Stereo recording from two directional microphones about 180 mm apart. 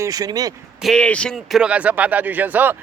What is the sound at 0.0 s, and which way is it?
Speech, 20° right (ahead or behind).